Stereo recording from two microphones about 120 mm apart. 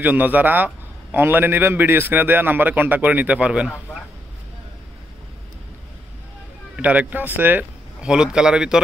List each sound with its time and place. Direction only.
0.0 s a man's voice: 15° right (ahead or behind)
6.8 s a man's voice: 10° right (ahead or behind)